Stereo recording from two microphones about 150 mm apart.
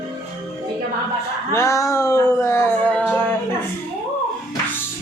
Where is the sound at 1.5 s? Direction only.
20° left (ahead or behind).